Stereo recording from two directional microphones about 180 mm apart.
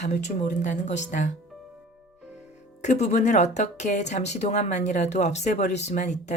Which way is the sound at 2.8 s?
40° left (ahead or behind).